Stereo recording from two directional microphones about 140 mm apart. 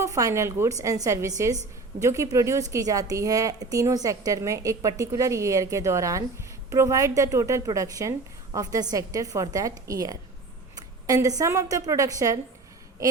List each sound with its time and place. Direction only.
0.0 s a woman's voice: 25° right (ahead or behind)